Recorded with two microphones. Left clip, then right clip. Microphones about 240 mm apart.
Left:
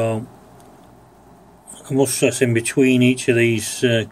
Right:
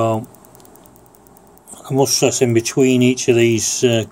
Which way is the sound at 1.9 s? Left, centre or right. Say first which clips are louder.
Right 2 dB; centre.